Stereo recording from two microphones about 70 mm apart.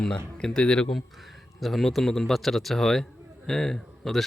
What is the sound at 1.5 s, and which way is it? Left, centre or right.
A man's voice, centre.